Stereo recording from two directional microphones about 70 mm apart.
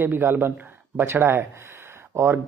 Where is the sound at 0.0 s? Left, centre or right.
Right.